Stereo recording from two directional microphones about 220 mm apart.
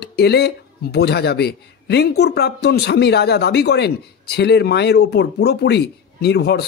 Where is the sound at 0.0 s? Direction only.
50° left (ahead or behind).